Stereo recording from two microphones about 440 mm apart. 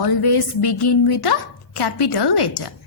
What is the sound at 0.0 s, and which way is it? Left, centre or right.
A woman's voice, left.